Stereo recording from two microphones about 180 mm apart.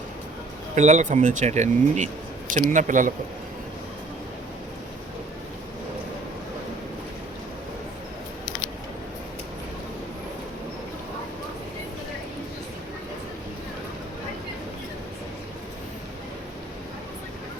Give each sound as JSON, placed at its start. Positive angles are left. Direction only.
{"t": 0.8, "sound": "speech", "side_deg": -40}